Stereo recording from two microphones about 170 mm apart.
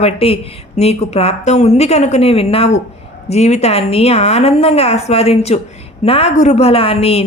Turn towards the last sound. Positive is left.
turn(degrees=35)  # may be behind; listen again after turning